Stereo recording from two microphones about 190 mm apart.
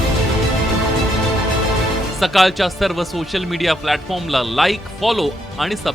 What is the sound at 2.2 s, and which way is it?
A man's voice, centre (ahead or behind).